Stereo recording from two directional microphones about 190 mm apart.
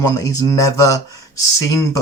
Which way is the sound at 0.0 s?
15° left (ahead or behind).